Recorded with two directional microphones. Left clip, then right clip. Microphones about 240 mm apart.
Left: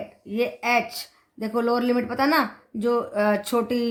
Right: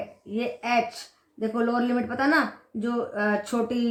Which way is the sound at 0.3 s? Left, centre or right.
Left.